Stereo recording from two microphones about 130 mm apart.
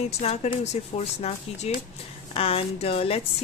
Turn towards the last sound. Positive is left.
turn(degrees=50)  # may be behind; listen again after turning